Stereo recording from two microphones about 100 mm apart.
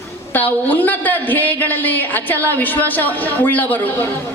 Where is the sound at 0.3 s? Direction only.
20° left (ahead or behind).